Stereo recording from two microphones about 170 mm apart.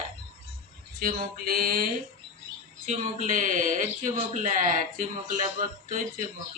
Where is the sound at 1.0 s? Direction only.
60° right (ahead or behind).